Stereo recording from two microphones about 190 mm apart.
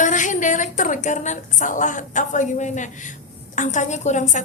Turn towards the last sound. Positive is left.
turn(degrees=40)  # may be behind; listen again after turning